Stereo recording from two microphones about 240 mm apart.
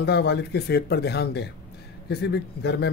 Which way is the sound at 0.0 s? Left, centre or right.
Left.